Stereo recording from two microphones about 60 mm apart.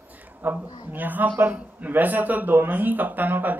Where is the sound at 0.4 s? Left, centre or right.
Right.